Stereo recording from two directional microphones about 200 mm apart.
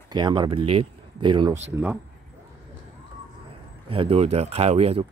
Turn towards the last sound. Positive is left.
turn(degrees=-30)  # may be behind; listen again after turning